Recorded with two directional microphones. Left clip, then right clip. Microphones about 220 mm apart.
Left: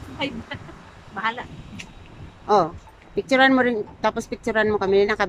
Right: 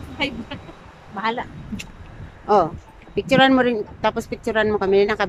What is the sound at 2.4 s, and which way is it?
Speech, 5° right (ahead or behind).